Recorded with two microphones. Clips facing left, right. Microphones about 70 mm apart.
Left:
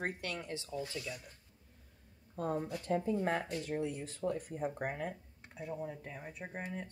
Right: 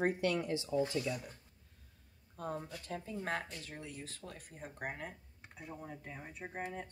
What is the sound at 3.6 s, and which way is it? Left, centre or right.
Speech, centre.